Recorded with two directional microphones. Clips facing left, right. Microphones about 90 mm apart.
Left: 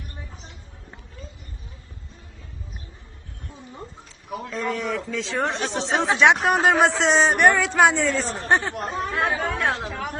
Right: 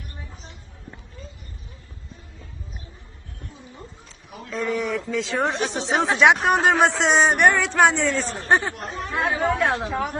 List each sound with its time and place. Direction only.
4.5 s speech: centre (ahead or behind)
8.7 s speech: 55° left (ahead or behind)
9.1 s speech: 20° right (ahead or behind)